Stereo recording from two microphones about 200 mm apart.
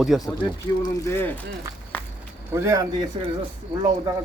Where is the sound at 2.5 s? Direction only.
15° right (ahead or behind).